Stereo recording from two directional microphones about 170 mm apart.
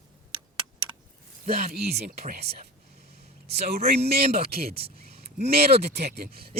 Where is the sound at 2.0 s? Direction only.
55° right (ahead or behind).